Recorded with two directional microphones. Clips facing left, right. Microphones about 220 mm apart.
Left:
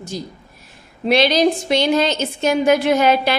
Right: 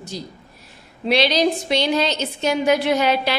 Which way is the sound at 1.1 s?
50° left (ahead or behind).